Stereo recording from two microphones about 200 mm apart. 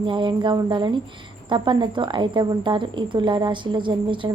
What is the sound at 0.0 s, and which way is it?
A woman's voice, 25° right (ahead or behind).